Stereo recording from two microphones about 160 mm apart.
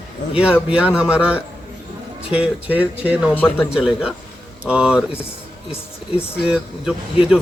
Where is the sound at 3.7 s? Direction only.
5° right (ahead or behind).